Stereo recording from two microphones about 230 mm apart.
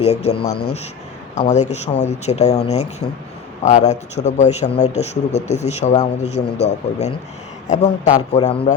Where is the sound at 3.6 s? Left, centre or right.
Left.